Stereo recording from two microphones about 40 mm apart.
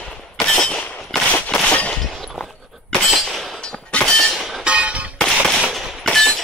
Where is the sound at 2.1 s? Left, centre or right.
Centre.